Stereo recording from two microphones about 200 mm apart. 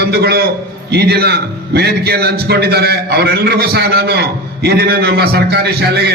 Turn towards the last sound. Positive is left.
turn(degrees=-55)  # may be behind; listen again after turning